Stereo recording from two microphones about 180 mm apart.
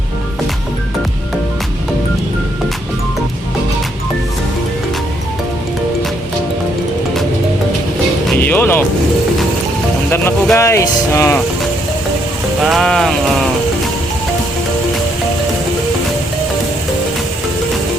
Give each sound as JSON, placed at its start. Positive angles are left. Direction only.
{"t": 8.3, "sound": "music", "side_deg": 10}
{"t": 10.1, "sound": "speech", "side_deg": 15}
{"t": 12.6, "sound": "speech", "side_deg": 0}